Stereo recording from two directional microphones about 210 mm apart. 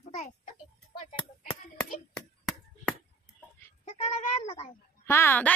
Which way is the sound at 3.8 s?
35° left (ahead or behind).